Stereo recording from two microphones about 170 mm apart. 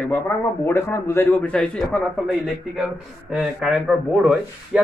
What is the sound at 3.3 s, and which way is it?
Speech, 5° right (ahead or behind).